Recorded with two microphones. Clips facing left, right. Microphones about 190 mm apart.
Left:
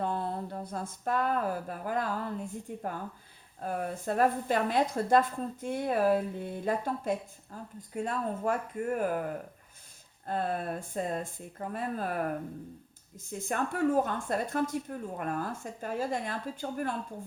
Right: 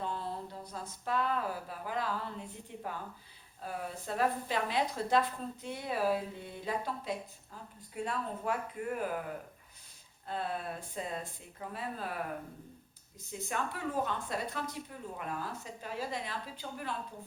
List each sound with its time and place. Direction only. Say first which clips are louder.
0.0 s a sound: left 6 dB; 55° left (ahead or behind)
3.6 s a woman's voice: left 6 dB; 50° left (ahead or behind)
10.2 s a woman's voice: left 5 dB; 50° left (ahead or behind)
13.4 s a woman's voice: left 8 dB; 50° left (ahead or behind)